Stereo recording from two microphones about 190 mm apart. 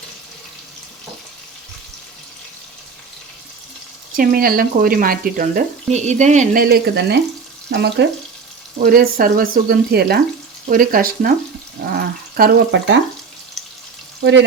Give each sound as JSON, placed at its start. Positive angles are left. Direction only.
{"t": 4.1, "sound": "speech", "side_deg": -45}
{"t": 8.8, "sound": "speech", "side_deg": -50}